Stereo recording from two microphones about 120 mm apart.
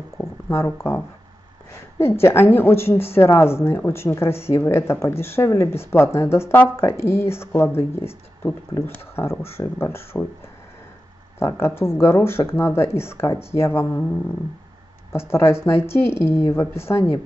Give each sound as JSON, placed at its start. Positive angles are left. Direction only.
{"t": 0.2, "sound": "a sound", "side_deg": 20}
{"t": 2.0, "sound": "a woman's voice", "side_deg": 20}
{"t": 11.3, "sound": "a woman's voice", "side_deg": 20}
{"t": 15.1, "sound": "a woman's voice", "side_deg": 20}